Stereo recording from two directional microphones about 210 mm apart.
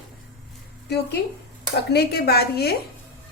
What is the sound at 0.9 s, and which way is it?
A woman's voice, 50° left (ahead or behind).